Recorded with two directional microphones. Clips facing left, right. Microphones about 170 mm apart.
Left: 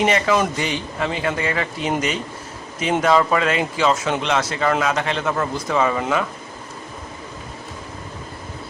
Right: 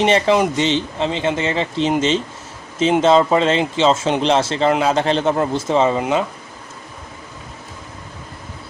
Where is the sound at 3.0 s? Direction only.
25° right (ahead or behind).